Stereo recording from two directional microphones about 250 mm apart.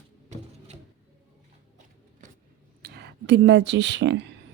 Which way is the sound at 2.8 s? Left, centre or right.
Right.